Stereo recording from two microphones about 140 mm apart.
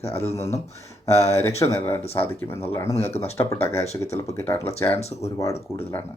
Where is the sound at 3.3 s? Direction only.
20° left (ahead or behind).